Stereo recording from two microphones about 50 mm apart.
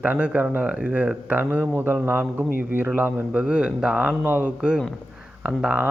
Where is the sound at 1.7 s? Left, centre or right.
Right.